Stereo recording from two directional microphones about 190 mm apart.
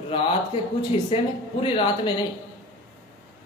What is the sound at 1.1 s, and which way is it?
Speech, 30° left (ahead or behind).